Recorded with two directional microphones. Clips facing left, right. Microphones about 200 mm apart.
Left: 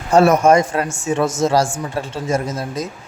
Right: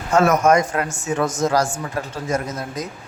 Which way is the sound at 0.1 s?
30° left (ahead or behind).